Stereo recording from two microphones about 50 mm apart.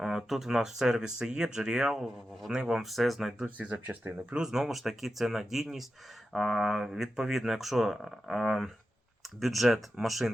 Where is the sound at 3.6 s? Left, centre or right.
Right.